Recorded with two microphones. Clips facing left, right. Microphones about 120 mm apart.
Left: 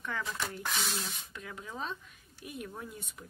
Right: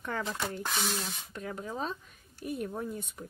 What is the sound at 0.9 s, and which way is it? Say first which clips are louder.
Speech: right 3 dB; 40° right (ahead or behind).